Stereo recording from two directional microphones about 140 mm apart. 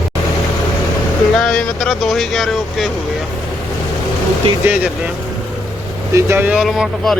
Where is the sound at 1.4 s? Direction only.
5° left (ahead or behind).